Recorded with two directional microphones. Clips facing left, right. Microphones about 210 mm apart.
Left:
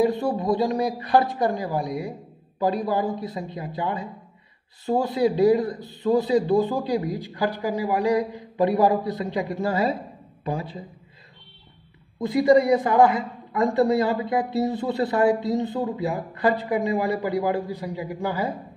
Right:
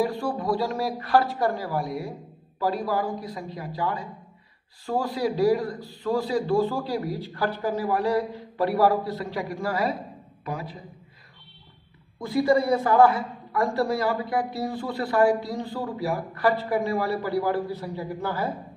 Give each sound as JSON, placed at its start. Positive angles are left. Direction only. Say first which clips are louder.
{"t": 0.0, "sound": "a man's voice", "louder": "left 4 dB", "side_deg": 20}
{"t": 12.2, "sound": "a man's voice", "louder": "left 4 dB", "side_deg": 20}